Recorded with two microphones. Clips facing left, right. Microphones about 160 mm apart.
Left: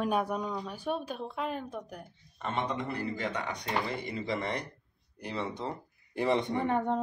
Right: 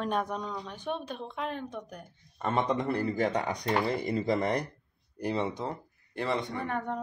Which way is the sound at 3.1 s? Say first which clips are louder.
Right 6 dB; 40° right (ahead or behind).